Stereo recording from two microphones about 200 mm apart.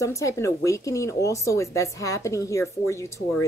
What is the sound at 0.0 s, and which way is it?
A woman's voice, 15° left (ahead or behind).